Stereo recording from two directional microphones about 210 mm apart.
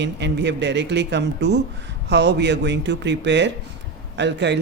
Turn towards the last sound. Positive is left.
turn(degrees=-55)  # may be behind; listen again after turning